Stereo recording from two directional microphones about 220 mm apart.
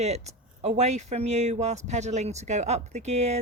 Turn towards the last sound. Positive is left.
turn(degrees=-30)  # may be behind; listen again after turning